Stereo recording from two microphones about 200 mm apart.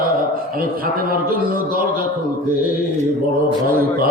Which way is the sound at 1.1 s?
45° right (ahead or behind).